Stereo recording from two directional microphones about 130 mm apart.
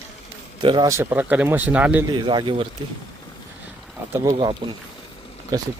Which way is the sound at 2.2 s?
40° right (ahead or behind).